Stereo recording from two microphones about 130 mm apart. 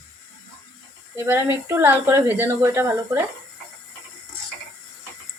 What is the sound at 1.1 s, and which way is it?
Speech, 15° right (ahead or behind).